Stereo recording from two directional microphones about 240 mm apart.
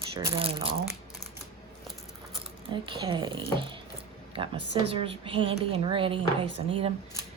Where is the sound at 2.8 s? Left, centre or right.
Centre.